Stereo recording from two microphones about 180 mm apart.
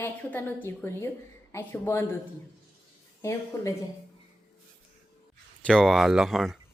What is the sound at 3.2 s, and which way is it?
Speech, 15° left (ahead or behind).